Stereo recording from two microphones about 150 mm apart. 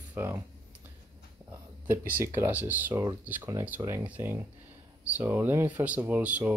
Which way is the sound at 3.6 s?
15° right (ahead or behind).